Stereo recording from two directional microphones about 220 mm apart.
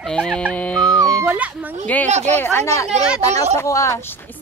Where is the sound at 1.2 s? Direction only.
5° right (ahead or behind).